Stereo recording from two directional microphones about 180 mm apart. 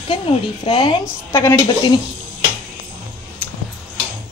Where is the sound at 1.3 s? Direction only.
15° left (ahead or behind).